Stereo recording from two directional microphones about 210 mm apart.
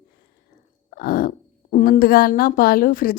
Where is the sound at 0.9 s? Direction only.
45° left (ahead or behind).